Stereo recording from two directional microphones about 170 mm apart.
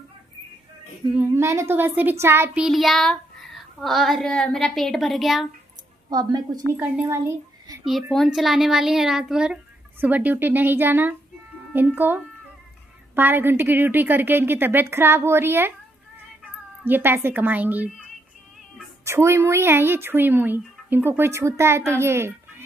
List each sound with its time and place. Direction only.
1.1 s a child's voice: 15° right (ahead or behind)
6.0 s a child's voice: 20° right (ahead or behind)
7.8 s a child's voice: centre (ahead or behind)
16.8 s a woman's voice: 10° right (ahead or behind)
19.0 s a woman's voice: 15° right (ahead or behind)